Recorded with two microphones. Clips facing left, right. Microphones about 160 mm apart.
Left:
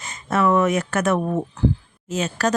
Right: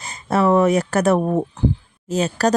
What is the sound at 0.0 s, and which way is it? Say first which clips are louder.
Speech: right 2 dB; 35° right (ahead or behind).